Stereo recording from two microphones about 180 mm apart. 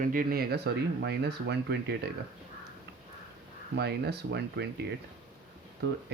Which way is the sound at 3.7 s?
65° right (ahead or behind).